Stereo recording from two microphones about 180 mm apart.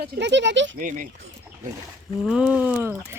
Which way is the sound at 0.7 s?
45° right (ahead or behind).